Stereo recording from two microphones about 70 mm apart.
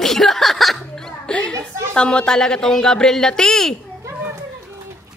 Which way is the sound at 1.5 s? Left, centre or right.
Right.